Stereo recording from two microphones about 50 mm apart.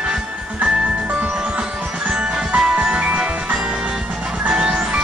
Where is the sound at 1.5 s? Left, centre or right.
Centre.